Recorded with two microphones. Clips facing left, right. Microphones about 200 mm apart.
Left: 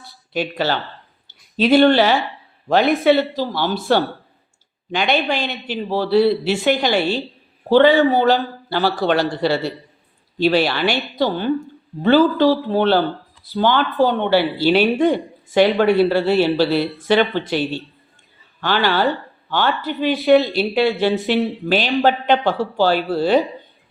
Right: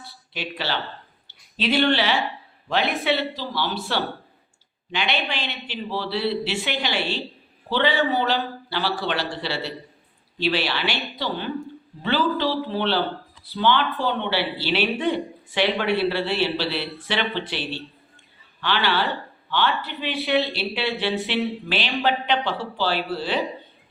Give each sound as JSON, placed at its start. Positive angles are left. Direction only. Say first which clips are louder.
{"t": 0.3, "sound": "a man's voice", "louder": "left 8 dB", "side_deg": 45}